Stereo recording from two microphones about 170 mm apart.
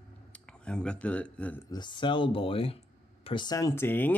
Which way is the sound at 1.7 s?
25° left (ahead or behind).